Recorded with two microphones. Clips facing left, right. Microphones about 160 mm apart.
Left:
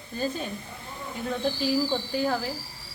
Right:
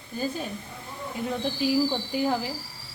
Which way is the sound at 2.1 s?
15° right (ahead or behind).